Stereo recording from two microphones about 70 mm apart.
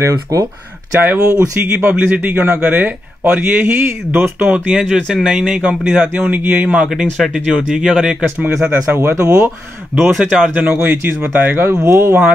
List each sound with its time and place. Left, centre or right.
0.3 s speech: right
0.9 s speech: right
4.8 s speech: centre; by 6.8 s right
6.8 s a man's voice: centre
8.9 s speech: right
9.9 s speech: centre
10.5 s speech: right